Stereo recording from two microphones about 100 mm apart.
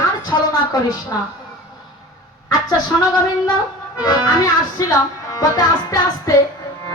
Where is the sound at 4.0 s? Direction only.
40° left (ahead or behind).